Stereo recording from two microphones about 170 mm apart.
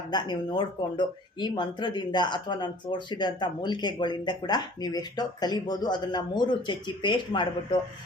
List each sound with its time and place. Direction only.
0.1 s speech: 25° left (ahead or behind)